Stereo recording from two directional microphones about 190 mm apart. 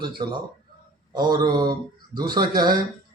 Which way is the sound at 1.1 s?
20° right (ahead or behind).